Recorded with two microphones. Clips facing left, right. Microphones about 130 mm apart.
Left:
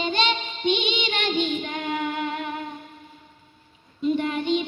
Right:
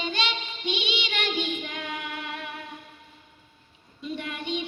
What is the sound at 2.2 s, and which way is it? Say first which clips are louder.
Music: left 8 dB; 55° left (ahead or behind).